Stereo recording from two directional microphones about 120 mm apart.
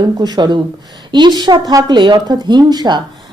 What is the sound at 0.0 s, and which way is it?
A woman's voice, 35° right (ahead or behind).